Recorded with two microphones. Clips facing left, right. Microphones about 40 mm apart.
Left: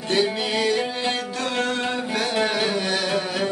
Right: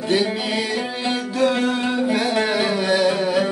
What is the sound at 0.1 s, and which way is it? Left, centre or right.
Music, centre.